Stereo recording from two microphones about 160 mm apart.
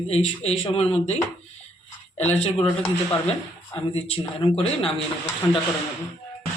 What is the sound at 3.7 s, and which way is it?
Speech, 40° left (ahead or behind).